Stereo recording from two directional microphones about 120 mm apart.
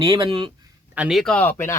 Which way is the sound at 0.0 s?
45° right (ahead or behind).